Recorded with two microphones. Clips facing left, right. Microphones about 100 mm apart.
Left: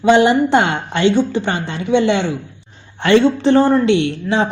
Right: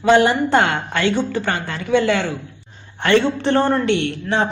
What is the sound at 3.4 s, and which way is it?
Speech, 15° left (ahead or behind).